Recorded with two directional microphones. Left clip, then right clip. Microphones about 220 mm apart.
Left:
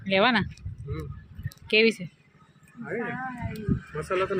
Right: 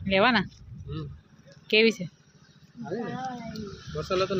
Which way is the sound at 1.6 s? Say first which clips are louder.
Even; 5° right (ahead or behind).